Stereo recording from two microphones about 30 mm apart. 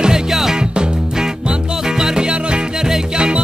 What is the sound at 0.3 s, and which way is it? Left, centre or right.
Music, centre.